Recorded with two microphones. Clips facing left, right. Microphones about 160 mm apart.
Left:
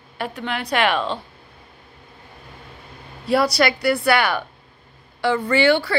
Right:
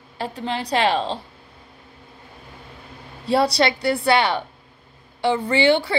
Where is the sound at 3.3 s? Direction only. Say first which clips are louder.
Even; 30° right (ahead or behind).